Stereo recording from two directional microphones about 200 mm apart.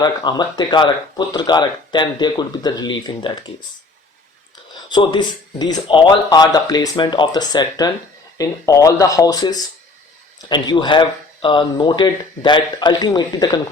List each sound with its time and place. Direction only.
0.0 s speech: 20° left (ahead or behind)
4.9 s speech: 20° left (ahead or behind)